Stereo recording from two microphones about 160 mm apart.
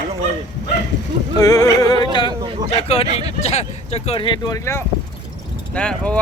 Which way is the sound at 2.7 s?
40° left (ahead or behind).